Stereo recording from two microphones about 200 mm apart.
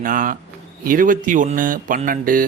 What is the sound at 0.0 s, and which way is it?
Speech, 40° right (ahead or behind).